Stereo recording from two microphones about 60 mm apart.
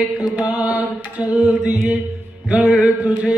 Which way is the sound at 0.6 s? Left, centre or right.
Right.